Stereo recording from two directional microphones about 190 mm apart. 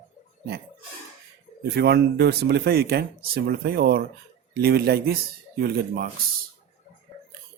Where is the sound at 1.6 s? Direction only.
60° right (ahead or behind).